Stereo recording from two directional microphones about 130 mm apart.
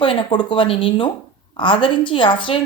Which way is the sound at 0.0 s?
40° left (ahead or behind).